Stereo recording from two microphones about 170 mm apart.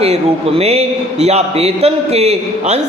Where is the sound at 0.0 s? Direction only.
35° right (ahead or behind).